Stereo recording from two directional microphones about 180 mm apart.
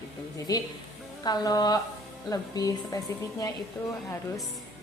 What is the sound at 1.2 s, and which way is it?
A woman's voice, 20° left (ahead or behind).